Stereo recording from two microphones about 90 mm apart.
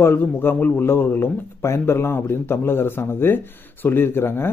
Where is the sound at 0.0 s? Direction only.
25° left (ahead or behind).